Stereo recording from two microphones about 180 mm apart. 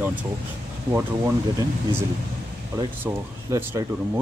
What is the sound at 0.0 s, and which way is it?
Speech, 10° right (ahead or behind).